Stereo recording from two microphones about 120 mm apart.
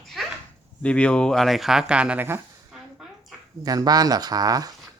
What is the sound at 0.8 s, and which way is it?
Speech, 10° left (ahead or behind).